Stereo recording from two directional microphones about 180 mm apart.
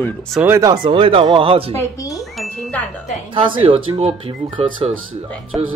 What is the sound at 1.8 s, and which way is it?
Speech, 20° left (ahead or behind).